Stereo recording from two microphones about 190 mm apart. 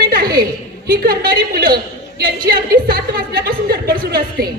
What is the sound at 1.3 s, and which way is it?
A woman's voice, 50° right (ahead or behind).